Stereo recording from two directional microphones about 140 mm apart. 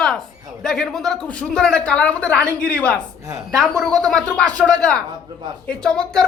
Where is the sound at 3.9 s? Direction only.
25° right (ahead or behind).